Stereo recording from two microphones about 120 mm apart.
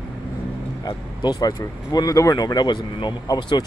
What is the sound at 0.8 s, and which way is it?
Speech, 35° left (ahead or behind).